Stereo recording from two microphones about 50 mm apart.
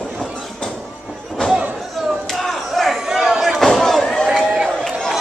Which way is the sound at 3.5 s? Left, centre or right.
Centre.